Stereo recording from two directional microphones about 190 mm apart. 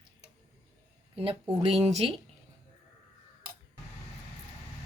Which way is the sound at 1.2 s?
30° right (ahead or behind).